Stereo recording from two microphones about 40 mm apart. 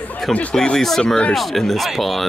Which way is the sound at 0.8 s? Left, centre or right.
Centre.